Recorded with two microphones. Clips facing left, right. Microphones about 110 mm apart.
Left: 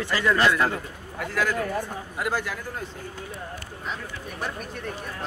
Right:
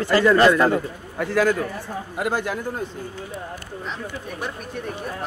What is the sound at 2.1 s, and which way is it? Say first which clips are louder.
Speech: right 4 dB; 25° right (ahead or behind).